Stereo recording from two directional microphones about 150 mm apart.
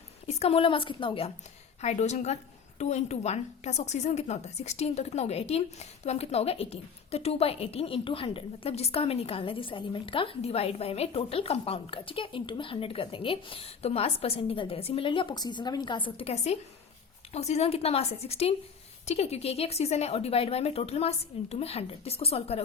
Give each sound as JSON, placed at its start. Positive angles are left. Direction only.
{"t": 0.3, "sound": "a woman's voice", "side_deg": 45}
{"t": 1.8, "sound": "a woman's voice", "side_deg": 50}